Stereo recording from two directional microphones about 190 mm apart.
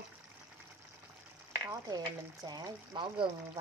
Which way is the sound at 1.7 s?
20° right (ahead or behind).